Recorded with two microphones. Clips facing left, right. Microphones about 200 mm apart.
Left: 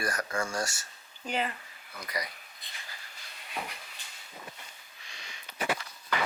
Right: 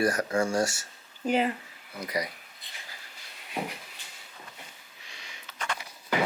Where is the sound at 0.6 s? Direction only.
5° right (ahead or behind).